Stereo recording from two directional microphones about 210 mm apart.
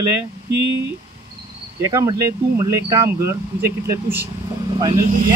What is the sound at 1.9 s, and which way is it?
Speech, 15° right (ahead or behind).